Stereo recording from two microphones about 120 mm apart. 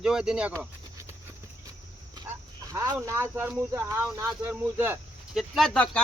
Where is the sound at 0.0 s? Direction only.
5° right (ahead or behind).